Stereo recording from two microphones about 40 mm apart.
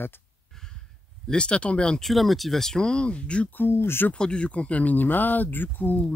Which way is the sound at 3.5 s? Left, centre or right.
Left.